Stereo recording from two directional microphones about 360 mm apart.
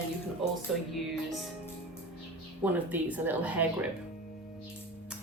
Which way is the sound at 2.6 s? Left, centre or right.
Centre.